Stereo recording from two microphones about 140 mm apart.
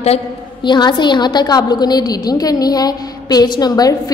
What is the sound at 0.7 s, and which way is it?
A woman's voice, 35° left (ahead or behind).